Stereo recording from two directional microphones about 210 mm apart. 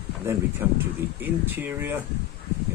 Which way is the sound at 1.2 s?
10° right (ahead or behind).